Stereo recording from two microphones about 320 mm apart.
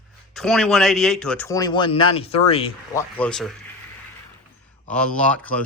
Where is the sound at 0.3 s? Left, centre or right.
Centre.